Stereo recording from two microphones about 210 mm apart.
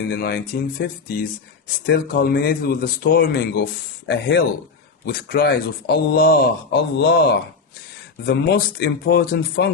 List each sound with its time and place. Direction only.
0.0 s a man's voice: 45° left (ahead or behind)
8.3 s a man's voice: 50° left (ahead or behind)